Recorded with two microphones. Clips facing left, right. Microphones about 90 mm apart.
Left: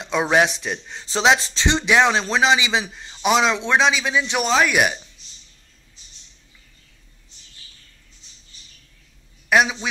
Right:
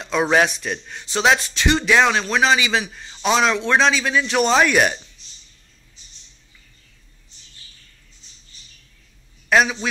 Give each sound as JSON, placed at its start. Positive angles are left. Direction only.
{"t": 0.0, "sound": "a man's voice", "side_deg": 20}
{"t": 4.5, "sound": "speech", "side_deg": 5}
{"t": 9.5, "sound": "a man's voice", "side_deg": 10}